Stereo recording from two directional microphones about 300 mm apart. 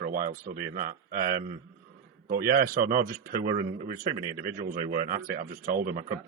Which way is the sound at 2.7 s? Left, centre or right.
Right.